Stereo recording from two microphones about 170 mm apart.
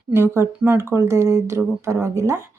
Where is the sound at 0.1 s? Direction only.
15° right (ahead or behind).